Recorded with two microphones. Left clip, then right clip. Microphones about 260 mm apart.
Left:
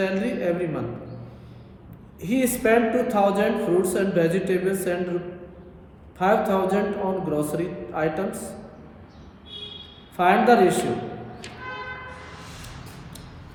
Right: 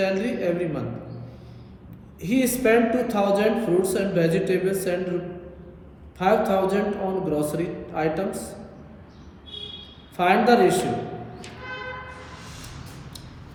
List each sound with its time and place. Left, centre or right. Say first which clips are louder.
0.0 s a man's voice: right 1 dB; centre
2.2 s a man's voice: right 1 dB; centre
6.1 s a man's voice: even; centre
10.2 s a man's voice: left 1 dB; centre